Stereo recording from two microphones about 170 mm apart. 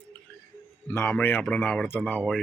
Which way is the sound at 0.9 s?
15° left (ahead or behind).